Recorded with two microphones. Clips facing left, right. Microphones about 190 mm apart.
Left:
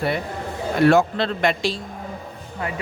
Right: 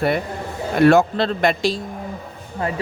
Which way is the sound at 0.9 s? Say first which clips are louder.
Right 2 dB; 40° right (ahead or behind).